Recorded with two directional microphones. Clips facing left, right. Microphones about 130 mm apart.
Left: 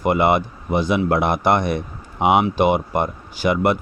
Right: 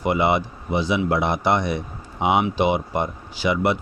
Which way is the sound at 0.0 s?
50° left (ahead or behind).